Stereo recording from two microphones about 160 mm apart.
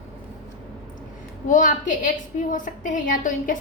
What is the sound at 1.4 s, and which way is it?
A woman's voice, 55° left (ahead or behind).